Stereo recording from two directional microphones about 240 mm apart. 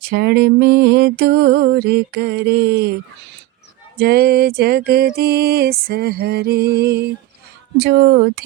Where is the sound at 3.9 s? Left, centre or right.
Right.